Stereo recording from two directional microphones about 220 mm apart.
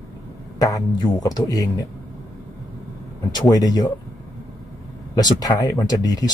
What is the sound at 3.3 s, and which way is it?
Speech, 20° left (ahead or behind).